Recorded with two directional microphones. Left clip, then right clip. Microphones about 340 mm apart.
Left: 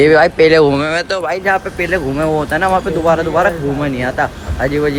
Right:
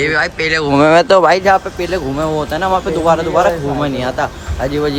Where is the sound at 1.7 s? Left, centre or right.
Centre.